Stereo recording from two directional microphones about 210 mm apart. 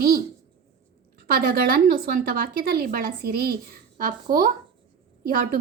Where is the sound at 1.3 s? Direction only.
45° right (ahead or behind).